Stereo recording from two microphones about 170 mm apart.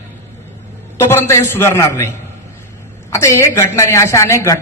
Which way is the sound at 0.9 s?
15° left (ahead or behind).